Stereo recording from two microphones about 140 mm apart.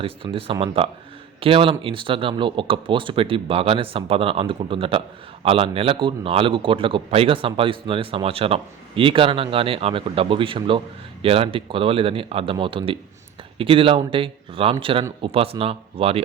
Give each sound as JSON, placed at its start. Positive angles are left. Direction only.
{"t": 0.2, "sound": "a man's voice", "side_deg": -35}